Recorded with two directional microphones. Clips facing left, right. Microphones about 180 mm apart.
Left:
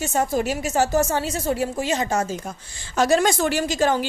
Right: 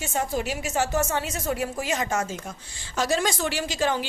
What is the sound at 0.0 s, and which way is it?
A woman's voice, 40° left (ahead or behind).